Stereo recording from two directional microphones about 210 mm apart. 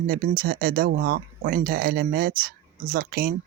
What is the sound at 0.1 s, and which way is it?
Speech, 45° right (ahead or behind).